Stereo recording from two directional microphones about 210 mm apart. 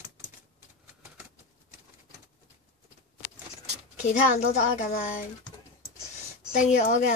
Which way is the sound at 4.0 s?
35° left (ahead or behind).